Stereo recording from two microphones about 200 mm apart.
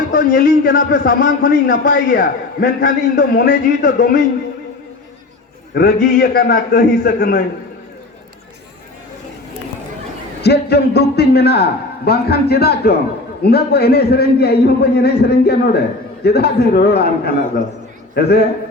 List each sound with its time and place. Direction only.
0.1 s a man's voice: 50° left (ahead or behind)
5.7 s a man's voice: 50° left (ahead or behind)
10.4 s a man's voice: 55° left (ahead or behind)